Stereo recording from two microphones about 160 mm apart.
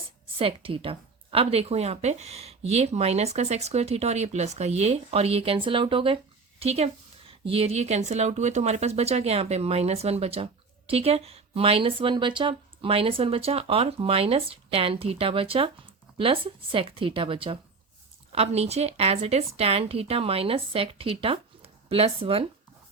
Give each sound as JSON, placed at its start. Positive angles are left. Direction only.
{"t": 0.3, "sound": "a woman's voice", "side_deg": -35}